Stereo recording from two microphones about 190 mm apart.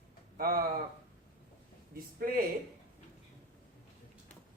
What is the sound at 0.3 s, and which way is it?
Speech, 50° right (ahead or behind).